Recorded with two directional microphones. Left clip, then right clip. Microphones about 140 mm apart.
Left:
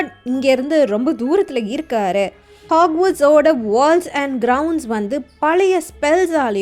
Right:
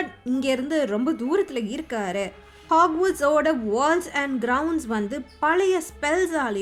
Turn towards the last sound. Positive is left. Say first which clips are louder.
# left 8 dB
turn(degrees=35)  # may be behind; listen again after turning